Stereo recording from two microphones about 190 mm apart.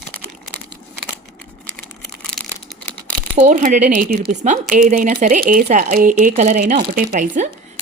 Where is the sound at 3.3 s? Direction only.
35° right (ahead or behind).